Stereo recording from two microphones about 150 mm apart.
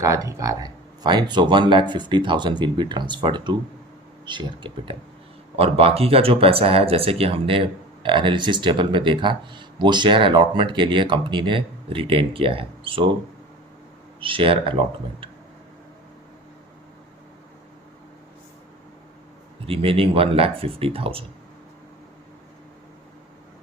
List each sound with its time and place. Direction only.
0.0 s speech: 20° right (ahead or behind)
14.2 s speech: 35° right (ahead or behind)
19.6 s speech: 40° right (ahead or behind)